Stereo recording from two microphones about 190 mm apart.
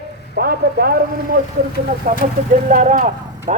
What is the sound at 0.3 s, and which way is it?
A woman's voice, 55° right (ahead or behind).